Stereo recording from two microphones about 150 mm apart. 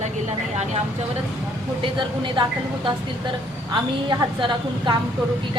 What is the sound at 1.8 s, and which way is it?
Speech, 35° right (ahead or behind).